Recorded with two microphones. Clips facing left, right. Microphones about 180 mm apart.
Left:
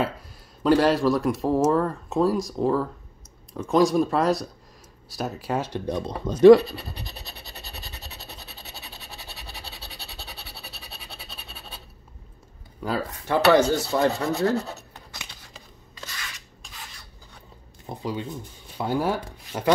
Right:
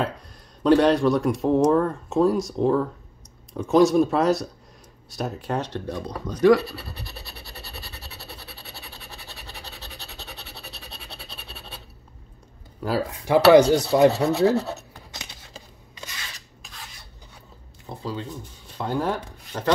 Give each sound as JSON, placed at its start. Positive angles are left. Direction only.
{"t": 0.7, "sound": "speech", "side_deg": 0}
{"t": 5.9, "sound": "speech", "side_deg": 20}
{"t": 13.2, "sound": "speech", "side_deg": -15}
{"t": 14.1, "sound": "speech", "side_deg": 0}
{"t": 15.1, "sound": "scissors", "side_deg": -20}
{"t": 17.8, "sound": "speech", "side_deg": 15}